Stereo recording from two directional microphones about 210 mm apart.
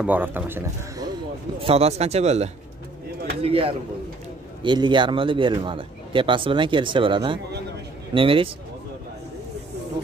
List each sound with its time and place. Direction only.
0.0 s a man's voice: 10° right (ahead or behind)
1.6 s a man's voice: 30° right (ahead or behind)